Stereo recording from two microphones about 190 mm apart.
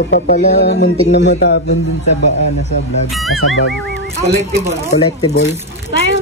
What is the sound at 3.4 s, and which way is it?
Speech, 90° left.